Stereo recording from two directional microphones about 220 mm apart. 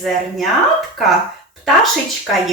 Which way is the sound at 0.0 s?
Centre (ahead or behind).